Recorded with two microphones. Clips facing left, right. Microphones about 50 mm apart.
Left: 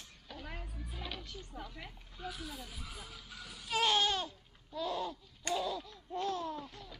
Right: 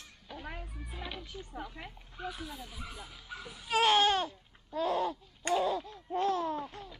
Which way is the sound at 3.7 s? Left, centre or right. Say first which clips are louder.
Right 5 dB; right.